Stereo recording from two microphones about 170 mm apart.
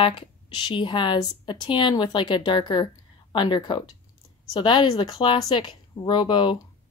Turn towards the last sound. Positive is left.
turn(degrees=30)  # may be behind; listen again after turning